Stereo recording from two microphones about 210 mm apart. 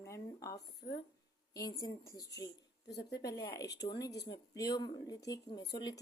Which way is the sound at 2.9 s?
50° left (ahead or behind).